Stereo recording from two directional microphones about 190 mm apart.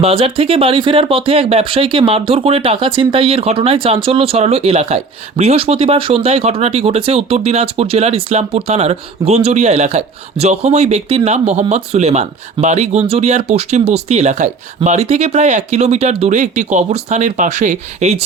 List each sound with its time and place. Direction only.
0.0 s speech: 30° right (ahead or behind)